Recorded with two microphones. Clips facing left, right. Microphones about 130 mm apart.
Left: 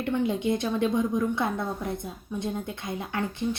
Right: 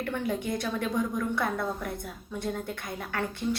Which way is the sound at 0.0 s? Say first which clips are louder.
Left 4 dB; 20° left (ahead or behind).